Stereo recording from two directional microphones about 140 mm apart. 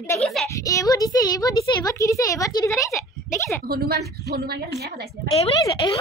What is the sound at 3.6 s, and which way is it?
A woman's voice, 90° right.